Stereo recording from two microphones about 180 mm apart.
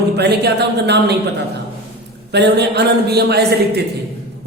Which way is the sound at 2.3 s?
70° right (ahead or behind).